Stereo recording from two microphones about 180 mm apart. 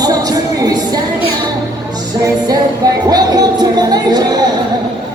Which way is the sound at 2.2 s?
20° right (ahead or behind).